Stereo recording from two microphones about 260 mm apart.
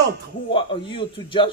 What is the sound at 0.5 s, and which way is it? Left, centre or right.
Speech, centre.